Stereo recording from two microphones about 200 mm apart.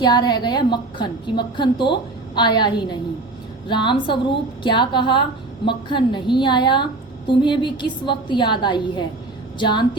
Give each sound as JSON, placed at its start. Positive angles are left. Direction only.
{"t": 0.0, "sound": "a woman's voice", "side_deg": 20}